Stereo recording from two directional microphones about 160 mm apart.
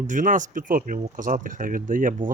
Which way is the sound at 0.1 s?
55° right (ahead or behind).